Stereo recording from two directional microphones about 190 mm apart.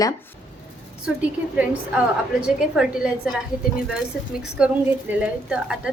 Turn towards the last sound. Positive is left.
turn(degrees=-5)  # may be behind; listen again after turning